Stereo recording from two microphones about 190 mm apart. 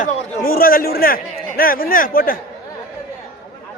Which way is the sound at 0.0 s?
50° left (ahead or behind).